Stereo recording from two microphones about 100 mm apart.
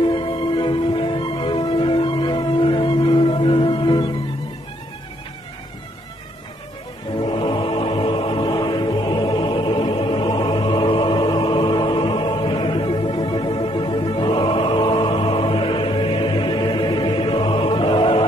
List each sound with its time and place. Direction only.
0.0 s music: 50° left (ahead or behind)
7.2 s music: 60° left (ahead or behind)